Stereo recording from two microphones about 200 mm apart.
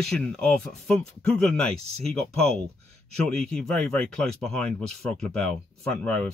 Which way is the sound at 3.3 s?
5° left (ahead or behind).